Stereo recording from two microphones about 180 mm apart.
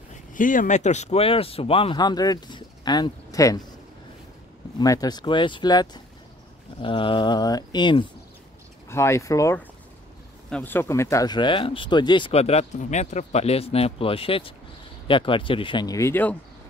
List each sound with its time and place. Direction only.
0.3 s speech: 50° left (ahead or behind); by 3.6 s 20° left (ahead or behind)
4.7 s speech: 20° left (ahead or behind)
8.8 s speech: 15° left (ahead or behind)